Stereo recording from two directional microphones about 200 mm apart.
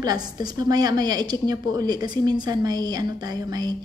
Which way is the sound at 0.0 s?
20° right (ahead or behind).